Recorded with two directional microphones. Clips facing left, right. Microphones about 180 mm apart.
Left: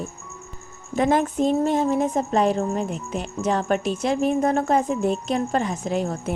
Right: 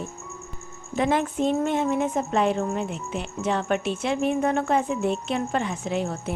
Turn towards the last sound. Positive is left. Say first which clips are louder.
# left 2 dB
turn(degrees=40)  # may be behind; listen again after turning